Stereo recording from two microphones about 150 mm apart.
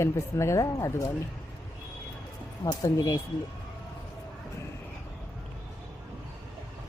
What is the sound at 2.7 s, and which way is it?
Speech, 20° left (ahead or behind).